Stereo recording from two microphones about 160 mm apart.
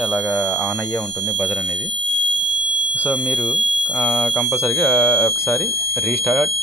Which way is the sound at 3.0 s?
10° left (ahead or behind).